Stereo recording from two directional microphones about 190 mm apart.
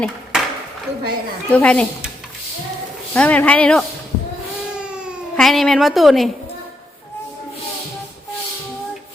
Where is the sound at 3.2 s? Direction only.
5° left (ahead or behind).